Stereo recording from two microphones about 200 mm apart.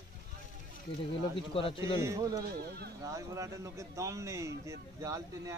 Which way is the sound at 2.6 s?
50° right (ahead or behind).